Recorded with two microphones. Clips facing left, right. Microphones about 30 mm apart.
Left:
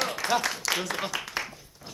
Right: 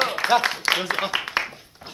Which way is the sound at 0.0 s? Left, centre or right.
Right.